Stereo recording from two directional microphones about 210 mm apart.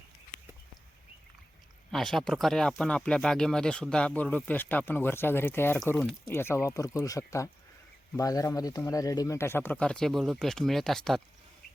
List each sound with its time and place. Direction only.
1.9 s speech: centre (ahead or behind)